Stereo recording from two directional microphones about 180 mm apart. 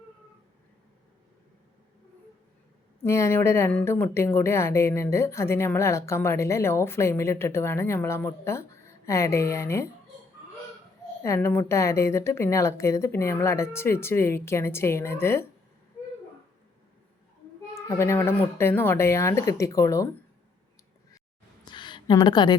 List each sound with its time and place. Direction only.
3.0 s a woman's voice: 15° left (ahead or behind)
11.2 s a woman's voice: 15° left (ahead or behind)
17.7 s a woman's voice: 15° left (ahead or behind)
21.6 s a sound: 25° left (ahead or behind)